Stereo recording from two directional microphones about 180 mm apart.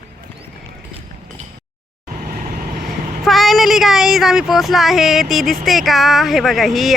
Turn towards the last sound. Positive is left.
turn(degrees=0)  # may be behind; listen again after turning